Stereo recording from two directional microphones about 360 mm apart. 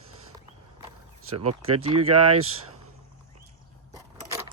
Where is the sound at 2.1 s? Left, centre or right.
Right.